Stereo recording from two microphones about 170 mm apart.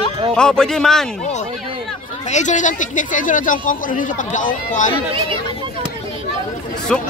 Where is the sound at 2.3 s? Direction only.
45° left (ahead or behind).